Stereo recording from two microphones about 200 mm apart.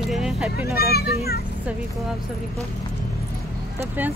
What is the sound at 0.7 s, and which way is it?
Speech, 50° left (ahead or behind).